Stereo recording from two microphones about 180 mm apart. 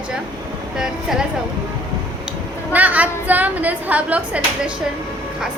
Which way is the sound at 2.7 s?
10° right (ahead or behind).